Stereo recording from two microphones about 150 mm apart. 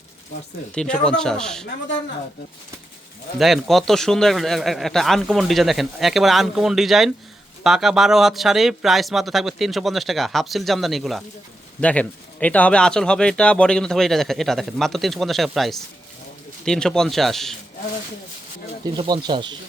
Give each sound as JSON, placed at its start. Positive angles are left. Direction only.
{"t": 0.7, "sound": "speech", "side_deg": 5}
{"t": 3.3, "sound": "speech", "side_deg": 0}
{"t": 18.9, "sound": "speech", "side_deg": -30}